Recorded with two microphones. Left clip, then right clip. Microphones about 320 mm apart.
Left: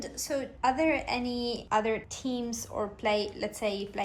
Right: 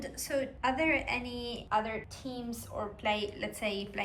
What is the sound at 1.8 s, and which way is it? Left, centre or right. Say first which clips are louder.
A woman's voice: left 7 dB; left.